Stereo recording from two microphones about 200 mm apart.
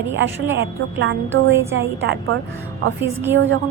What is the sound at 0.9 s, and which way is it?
A woman's voice, 70° right (ahead or behind).